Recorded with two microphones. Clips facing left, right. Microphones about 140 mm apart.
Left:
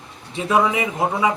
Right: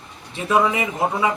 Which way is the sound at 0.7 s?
10° left (ahead or behind).